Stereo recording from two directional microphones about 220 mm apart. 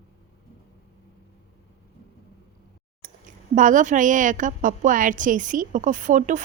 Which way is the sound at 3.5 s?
35° right (ahead or behind).